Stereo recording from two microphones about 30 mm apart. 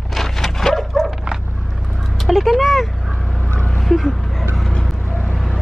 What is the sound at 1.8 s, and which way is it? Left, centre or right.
Vehicle, centre.